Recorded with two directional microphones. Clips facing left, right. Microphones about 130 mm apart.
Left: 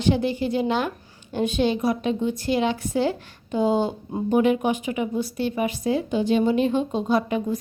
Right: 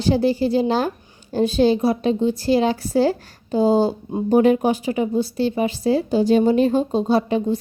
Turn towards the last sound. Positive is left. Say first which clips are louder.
# right 4 dB
turn(degrees=-30)  # may be behind; listen again after turning